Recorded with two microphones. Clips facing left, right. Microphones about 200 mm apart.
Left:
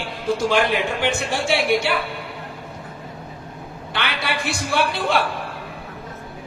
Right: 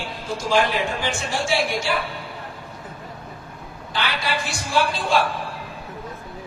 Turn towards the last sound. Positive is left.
turn(degrees=60)  # may be behind; listen again after turning